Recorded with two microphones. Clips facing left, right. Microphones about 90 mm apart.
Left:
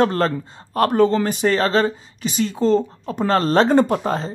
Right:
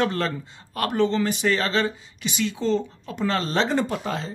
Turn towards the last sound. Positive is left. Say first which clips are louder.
# left 7 dB
turn(degrees=40)  # may be behind; listen again after turning